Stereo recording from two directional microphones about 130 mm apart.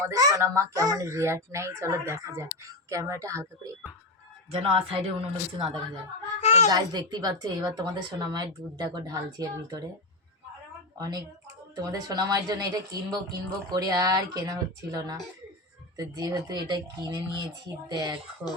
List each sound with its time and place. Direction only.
0.1 s speech: 25° right (ahead or behind)
4.5 s speech: 45° right (ahead or behind)
6.4 s a sound: 60° left (ahead or behind)
6.7 s speech: 35° right (ahead or behind)
10.9 s a woman's voice: 30° right (ahead or behind)